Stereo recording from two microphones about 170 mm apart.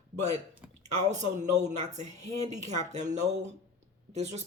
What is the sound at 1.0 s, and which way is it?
Speech, 45° right (ahead or behind).